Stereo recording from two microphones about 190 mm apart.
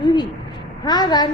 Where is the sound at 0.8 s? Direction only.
20° left (ahead or behind).